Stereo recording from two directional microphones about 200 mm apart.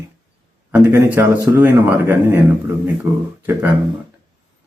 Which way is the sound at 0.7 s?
10° right (ahead or behind).